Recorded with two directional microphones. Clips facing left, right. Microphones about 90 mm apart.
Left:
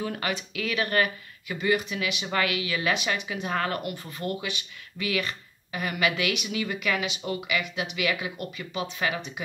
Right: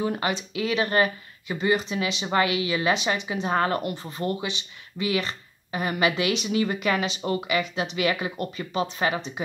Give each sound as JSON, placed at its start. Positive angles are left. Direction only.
{"t": 0.0, "sound": "speech", "side_deg": -25}